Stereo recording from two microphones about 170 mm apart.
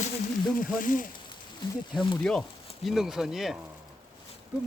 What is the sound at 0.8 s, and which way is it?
Speech, 55° left (ahead or behind).